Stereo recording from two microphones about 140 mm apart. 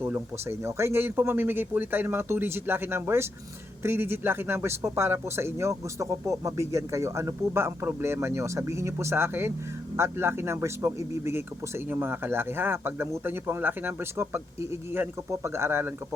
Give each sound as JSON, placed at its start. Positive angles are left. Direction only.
{"t": 0.0, "sound": "a man's voice", "side_deg": -15}